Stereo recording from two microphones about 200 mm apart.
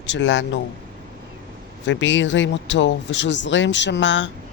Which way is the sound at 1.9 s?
70° left (ahead or behind).